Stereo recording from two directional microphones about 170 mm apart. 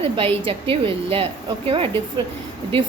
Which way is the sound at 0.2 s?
35° right (ahead or behind).